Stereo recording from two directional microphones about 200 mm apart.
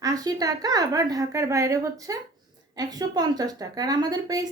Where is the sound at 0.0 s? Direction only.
20° right (ahead or behind).